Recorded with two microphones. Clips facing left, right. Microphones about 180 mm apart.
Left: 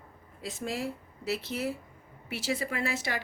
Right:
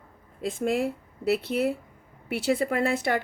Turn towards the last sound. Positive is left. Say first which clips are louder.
# right 8 dB
turn(degrees=-55)  # may be behind; listen again after turning